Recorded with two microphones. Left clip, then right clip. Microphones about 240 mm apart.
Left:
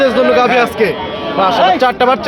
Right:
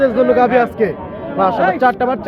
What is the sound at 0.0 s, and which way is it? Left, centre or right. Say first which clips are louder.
A man's voice: left 2 dB; centre.